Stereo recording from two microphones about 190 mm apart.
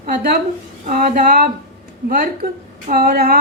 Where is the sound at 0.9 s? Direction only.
45° right (ahead or behind).